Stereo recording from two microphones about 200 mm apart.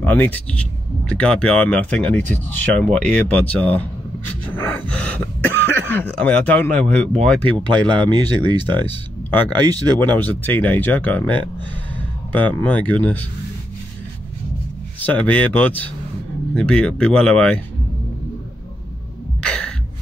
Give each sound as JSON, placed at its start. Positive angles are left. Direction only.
{"t": 0.0, "sound": "speech", "side_deg": 10}
{"t": 9.5, "sound": "speech", "side_deg": -20}
{"t": 10.1, "sound": "speech", "side_deg": 10}
{"t": 15.0, "sound": "speech", "side_deg": 5}
{"t": 19.4, "sound": "gasp", "side_deg": 5}